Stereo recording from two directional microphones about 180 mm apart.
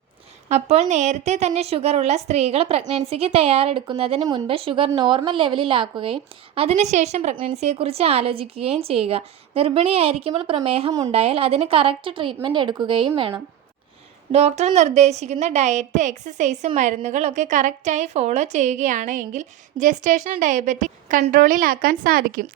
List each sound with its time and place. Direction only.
0.4 s a woman's voice: 35° right (ahead or behind)
14.3 s a woman's voice: 35° right (ahead or behind); by 22.4 s 55° right (ahead or behind)